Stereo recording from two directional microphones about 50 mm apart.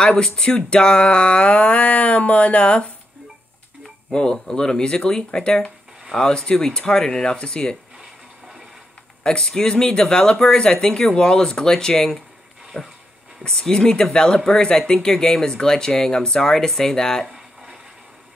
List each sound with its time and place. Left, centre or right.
0.0 s a sound: centre
4.1 s speech: centre
9.2 s speech: centre